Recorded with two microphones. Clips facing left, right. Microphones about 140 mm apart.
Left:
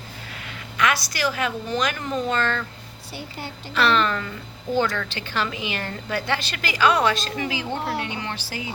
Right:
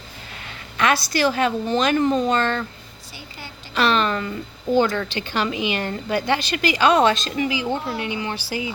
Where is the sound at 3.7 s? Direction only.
20° right (ahead or behind).